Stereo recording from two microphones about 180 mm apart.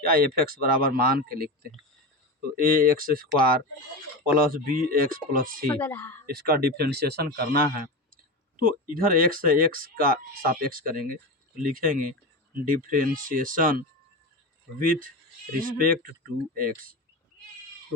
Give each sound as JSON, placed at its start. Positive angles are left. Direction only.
{"t": 0.0, "sound": "speech", "side_deg": -55}
{"t": 2.6, "sound": "speech", "side_deg": -50}
{"t": 4.4, "sound": "speech", "side_deg": -50}
{"t": 5.8, "sound": "speech", "side_deg": 10}
{"t": 6.2, "sound": "speech", "side_deg": -55}